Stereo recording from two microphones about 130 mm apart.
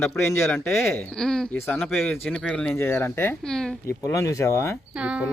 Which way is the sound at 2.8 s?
20° left (ahead or behind).